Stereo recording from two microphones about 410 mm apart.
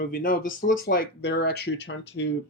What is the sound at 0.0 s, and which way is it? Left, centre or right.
Speech, left.